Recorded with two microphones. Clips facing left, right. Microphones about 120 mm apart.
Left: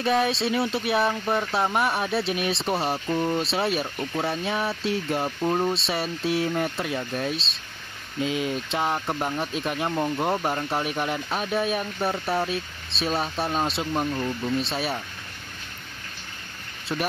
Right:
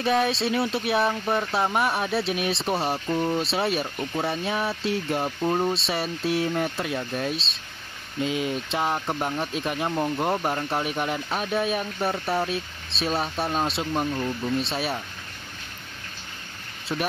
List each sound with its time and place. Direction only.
0.0 s speech: centre (ahead or behind)
16.9 s speech: centre (ahead or behind)